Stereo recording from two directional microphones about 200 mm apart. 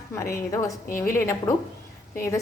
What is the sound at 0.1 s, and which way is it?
A woman's voice, 15° left (ahead or behind).